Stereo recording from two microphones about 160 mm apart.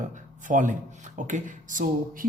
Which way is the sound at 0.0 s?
50° right (ahead or behind).